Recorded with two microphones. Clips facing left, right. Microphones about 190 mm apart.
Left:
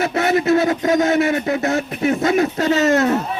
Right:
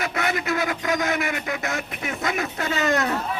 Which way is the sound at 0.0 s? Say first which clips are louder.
Left 9 dB; 30° left (ahead or behind).